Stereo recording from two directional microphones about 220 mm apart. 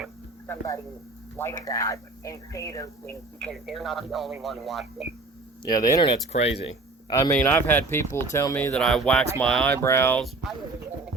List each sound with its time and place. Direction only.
0.4 s speech: 10° left (ahead or behind)
5.6 s speech: 15° left (ahead or behind)
7.1 s speech: 15° left (ahead or behind)